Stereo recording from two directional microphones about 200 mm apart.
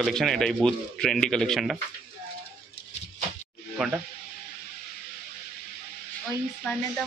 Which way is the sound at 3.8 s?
Centre (ahead or behind).